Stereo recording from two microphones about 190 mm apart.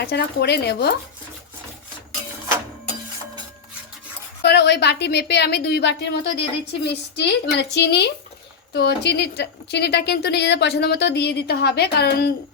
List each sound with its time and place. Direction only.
0.0 s a woman's voice: 60° left (ahead or behind)
4.4 s a woman's voice: 65° left (ahead or behind)